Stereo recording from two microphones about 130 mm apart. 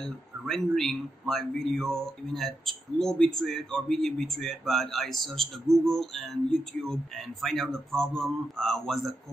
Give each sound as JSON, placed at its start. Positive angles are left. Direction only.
{"t": 0.0, "sound": "speech", "side_deg": 5}